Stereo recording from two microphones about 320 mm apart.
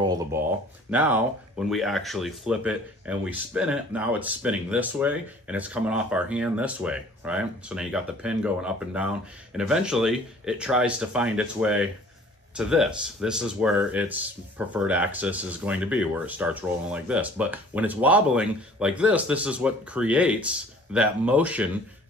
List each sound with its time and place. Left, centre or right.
0.0 s speech: centre